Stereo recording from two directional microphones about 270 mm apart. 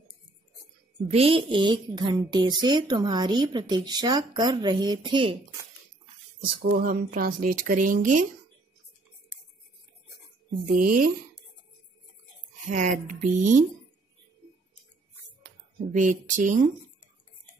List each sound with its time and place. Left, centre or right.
1.0 s speech: right
6.6 s speech: right
10.7 s speech: right
12.6 s speech: right
15.9 s speech: right